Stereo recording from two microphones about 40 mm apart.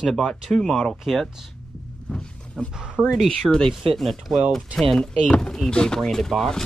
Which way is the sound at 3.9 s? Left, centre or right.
Centre.